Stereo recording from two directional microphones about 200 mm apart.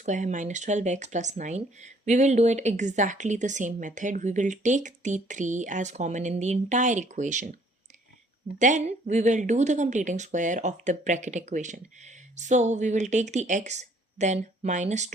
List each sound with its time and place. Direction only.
0.0 s speech: 35° right (ahead or behind)
8.5 s speech: 35° right (ahead or behind)